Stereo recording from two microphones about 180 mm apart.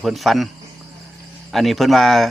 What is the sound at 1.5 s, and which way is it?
Speech, centre (ahead or behind).